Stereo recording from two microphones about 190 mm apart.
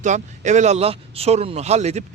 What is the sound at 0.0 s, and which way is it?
Speech, 40° right (ahead or behind).